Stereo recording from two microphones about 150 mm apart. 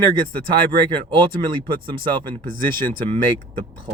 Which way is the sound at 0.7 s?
35° right (ahead or behind).